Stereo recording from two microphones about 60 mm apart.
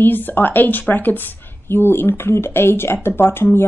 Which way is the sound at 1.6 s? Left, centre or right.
Left.